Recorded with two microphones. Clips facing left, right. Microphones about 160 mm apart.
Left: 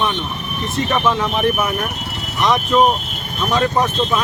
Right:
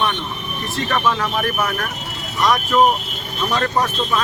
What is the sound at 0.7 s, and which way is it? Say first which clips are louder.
Speech: left 2 dB; 20° left (ahead or behind).